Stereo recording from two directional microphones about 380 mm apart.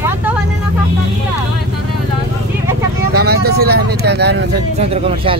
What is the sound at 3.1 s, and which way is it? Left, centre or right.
Speech, right.